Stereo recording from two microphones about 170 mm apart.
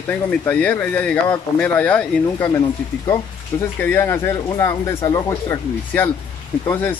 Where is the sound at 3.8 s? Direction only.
10° left (ahead or behind).